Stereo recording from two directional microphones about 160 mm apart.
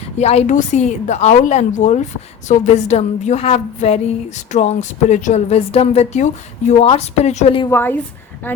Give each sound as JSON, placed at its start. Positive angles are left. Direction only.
{"t": 0.2, "sound": "a woman's voice", "side_deg": 45}
{"t": 7.7, "sound": "a woman's voice", "side_deg": 15}